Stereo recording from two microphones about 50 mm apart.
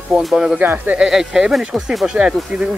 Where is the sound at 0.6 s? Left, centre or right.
Right.